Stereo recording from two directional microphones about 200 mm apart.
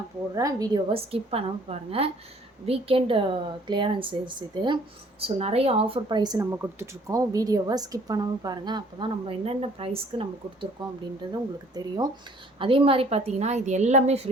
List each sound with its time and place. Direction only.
0.3 s a woman's voice: 20° right (ahead or behind); by 14.2 s 35° right (ahead or behind)